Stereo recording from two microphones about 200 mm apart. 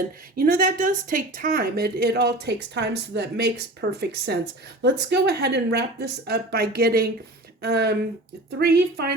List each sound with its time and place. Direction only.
0.3 s speech: 45° right (ahead or behind)